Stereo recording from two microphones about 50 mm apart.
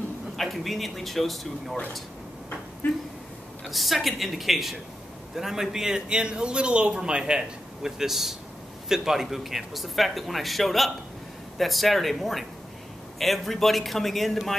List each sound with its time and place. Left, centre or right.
0.4 s speech: centre
2.8 s speech: left
3.7 s a man's voice: centre